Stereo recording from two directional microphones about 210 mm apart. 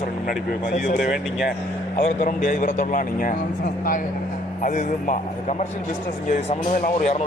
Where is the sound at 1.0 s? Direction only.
Centre (ahead or behind).